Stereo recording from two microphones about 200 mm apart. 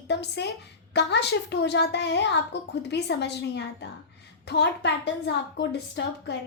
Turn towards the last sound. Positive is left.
turn(degrees=60)  # may be behind; listen again after turning